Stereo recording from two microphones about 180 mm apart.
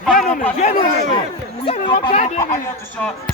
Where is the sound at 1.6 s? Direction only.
30° left (ahead or behind).